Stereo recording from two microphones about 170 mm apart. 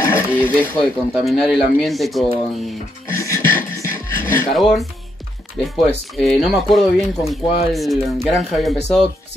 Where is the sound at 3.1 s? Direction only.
20° left (ahead or behind).